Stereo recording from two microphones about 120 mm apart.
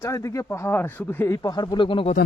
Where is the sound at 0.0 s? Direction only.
25° left (ahead or behind); by 2.0 s 45° left (ahead or behind).